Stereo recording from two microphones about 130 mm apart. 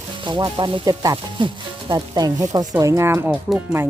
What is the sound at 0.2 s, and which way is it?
Speech, 40° right (ahead or behind).